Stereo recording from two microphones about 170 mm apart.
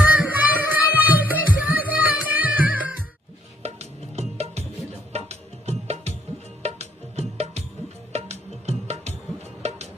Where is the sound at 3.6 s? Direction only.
40° right (ahead or behind).